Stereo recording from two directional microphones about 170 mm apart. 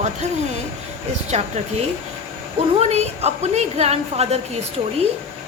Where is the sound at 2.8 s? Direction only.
40° right (ahead or behind).